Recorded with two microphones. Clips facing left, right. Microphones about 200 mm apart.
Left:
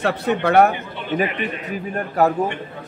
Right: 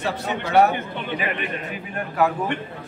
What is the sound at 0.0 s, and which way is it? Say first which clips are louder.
Speech: left 6 dB; 60° left (ahead or behind).